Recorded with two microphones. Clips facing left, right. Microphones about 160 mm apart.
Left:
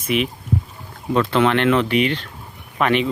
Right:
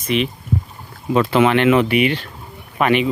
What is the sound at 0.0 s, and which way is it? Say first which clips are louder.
Speech: right 1 dB; 5° left (ahead or behind).